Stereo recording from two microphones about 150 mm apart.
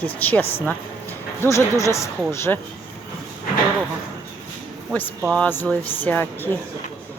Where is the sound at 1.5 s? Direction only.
20° left (ahead or behind).